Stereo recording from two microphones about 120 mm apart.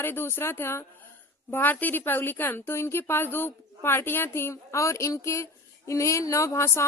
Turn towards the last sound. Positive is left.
turn(degrees=25)  # may be behind; listen again after turning